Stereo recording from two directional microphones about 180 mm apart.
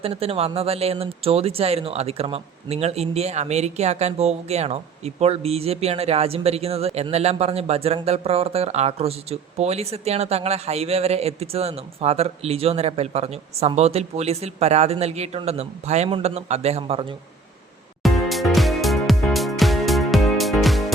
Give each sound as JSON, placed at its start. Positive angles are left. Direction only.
{"t": 0.0, "sound": "speech", "side_deg": -35}
{"t": 18.0, "sound": "music", "side_deg": 0}